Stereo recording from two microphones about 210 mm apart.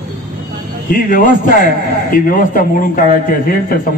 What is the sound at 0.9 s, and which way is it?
A man's voice, 40° left (ahead or behind).